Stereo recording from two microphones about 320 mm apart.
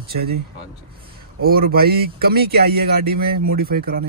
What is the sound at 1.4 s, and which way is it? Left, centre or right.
Speech, right.